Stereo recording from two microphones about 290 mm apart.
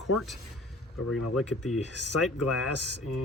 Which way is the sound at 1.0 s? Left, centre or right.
Left.